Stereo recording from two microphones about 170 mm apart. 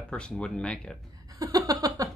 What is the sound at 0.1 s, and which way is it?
Speech, 5° left (ahead or behind).